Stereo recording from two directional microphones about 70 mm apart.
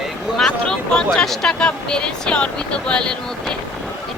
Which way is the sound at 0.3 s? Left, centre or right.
Centre.